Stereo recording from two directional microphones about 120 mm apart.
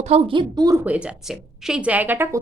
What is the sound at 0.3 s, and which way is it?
Speech, 40° right (ahead or behind).